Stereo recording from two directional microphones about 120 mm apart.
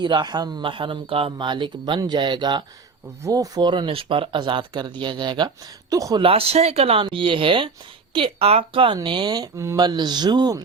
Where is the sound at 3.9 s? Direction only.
50° right (ahead or behind); by 6.2 s 30° right (ahead or behind).